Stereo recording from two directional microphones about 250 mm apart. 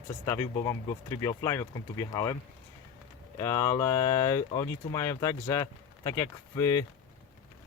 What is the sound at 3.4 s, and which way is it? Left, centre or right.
Speech, centre.